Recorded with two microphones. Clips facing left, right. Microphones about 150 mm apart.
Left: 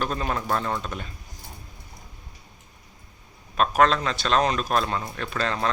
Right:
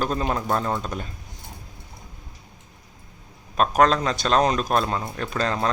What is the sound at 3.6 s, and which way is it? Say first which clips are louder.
A man's voice: right 2 dB; 40° right (ahead or behind).